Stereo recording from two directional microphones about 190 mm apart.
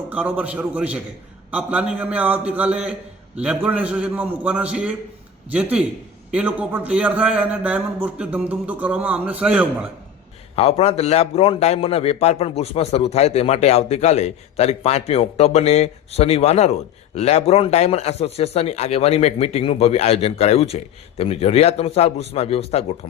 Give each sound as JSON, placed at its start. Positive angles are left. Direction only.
{"t": 0.1, "sound": "a man's voice", "side_deg": -5}
{"t": 10.5, "sound": "a man's voice", "side_deg": 30}